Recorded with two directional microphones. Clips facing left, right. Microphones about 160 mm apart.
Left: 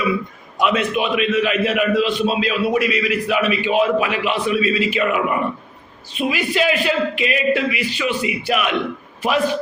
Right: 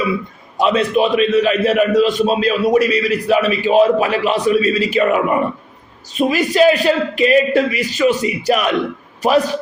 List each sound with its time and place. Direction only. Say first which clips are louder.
0.5 s a man's voice: right 4 dB; 35° right (ahead or behind)